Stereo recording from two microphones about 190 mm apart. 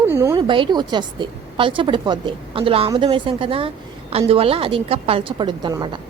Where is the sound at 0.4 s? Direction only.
25° right (ahead or behind).